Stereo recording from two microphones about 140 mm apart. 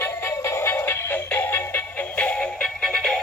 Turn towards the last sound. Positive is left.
turn(degrees=5)  # may be behind; listen again after turning